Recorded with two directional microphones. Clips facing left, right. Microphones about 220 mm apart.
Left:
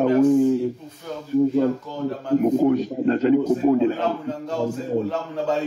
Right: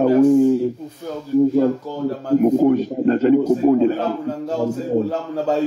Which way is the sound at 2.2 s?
40° right (ahead or behind).